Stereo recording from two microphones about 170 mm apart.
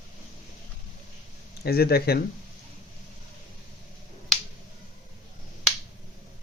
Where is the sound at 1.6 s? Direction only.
65° left (ahead or behind).